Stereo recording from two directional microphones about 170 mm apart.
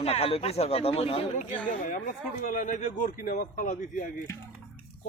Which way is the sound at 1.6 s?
50° left (ahead or behind).